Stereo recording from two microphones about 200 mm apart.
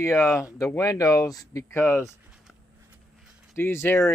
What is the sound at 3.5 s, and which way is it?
Speech, 10° left (ahead or behind).